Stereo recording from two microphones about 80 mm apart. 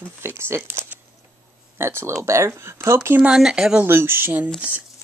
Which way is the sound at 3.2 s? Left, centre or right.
Centre.